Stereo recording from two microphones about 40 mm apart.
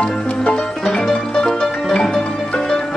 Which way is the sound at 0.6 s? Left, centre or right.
Centre.